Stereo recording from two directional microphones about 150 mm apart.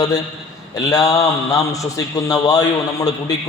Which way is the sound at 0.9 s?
25° left (ahead or behind).